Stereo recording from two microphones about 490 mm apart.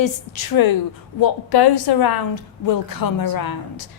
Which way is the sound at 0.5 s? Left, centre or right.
Left.